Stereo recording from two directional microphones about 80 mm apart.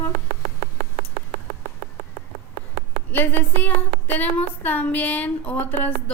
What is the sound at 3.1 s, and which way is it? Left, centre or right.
A woman's voice, left.